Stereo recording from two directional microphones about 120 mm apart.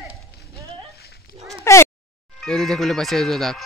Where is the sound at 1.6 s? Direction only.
20° left (ahead or behind).